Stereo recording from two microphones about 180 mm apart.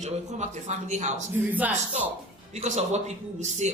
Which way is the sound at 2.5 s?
40° right (ahead or behind).